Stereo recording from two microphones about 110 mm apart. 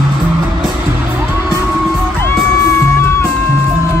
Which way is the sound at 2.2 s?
25° left (ahead or behind).